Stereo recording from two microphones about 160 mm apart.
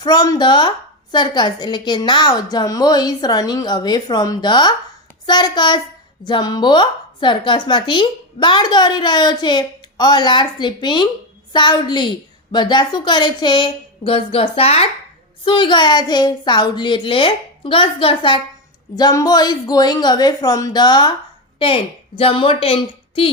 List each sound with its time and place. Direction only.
0.0 s a woman's voice: 25° left (ahead or behind)